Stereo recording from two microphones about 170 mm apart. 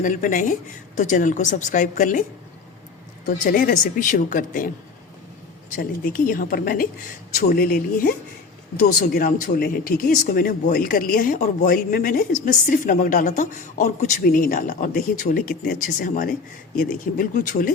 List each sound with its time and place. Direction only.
0.0 s speech: 50° left (ahead or behind)
3.2 s speech: 55° left (ahead or behind)